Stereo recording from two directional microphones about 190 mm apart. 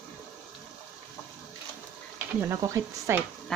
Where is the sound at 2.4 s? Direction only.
15° right (ahead or behind).